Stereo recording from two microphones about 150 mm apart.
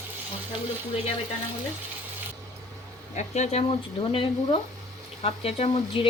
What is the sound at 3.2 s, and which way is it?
Speech, 50° left (ahead or behind).